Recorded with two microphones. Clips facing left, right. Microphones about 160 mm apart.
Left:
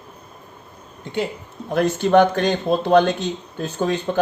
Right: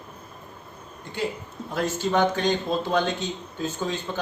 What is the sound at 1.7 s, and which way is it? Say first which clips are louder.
Speech: left 8 dB; 65° left (ahead or behind).